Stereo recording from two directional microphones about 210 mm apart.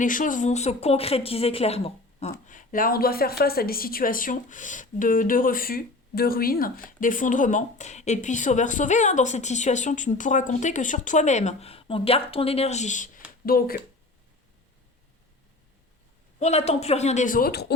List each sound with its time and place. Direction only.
0.0 s speech: 40° left (ahead or behind)
2.5 s a woman's voice: 40° left (ahead or behind)
16.4 s a woman's voice: 30° left (ahead or behind); by 17.7 s 50° left (ahead or behind)